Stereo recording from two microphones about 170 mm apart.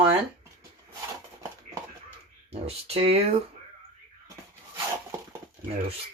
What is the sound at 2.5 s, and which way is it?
Speech, 35° right (ahead or behind).